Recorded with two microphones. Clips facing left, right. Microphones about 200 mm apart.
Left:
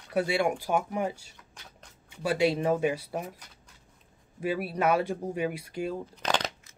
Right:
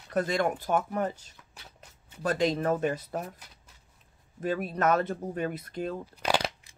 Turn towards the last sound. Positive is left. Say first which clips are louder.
# right 2 dB
turn(degrees=-10)  # may be behind; listen again after turning